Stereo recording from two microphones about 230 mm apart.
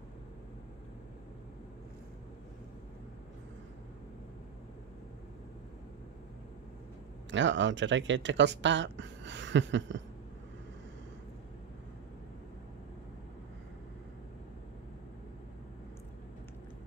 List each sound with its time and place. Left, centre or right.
7.2 s speech: right